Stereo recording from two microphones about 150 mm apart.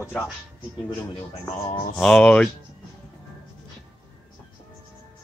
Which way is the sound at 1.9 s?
5° left (ahead or behind).